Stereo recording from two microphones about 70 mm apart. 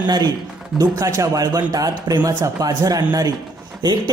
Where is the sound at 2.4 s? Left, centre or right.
Right.